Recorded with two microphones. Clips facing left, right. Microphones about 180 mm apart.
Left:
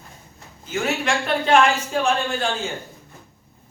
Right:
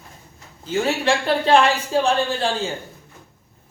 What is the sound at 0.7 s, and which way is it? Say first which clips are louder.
Speech: right 3 dB; 30° right (ahead or behind).